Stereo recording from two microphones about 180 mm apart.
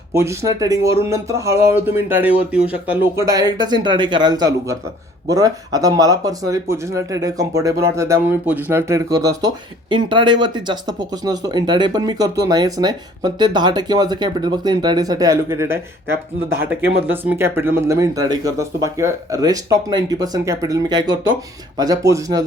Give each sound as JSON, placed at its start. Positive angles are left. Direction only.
{"t": 0.1, "sound": "speech", "side_deg": -15}
{"t": 17.1, "sound": "speech", "side_deg": -10}